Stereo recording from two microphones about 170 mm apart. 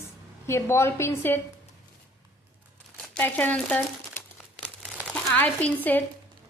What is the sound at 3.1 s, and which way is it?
Crumpling, 10° left (ahead or behind).